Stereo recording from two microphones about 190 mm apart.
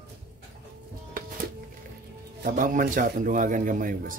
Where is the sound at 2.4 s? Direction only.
45° right (ahead or behind).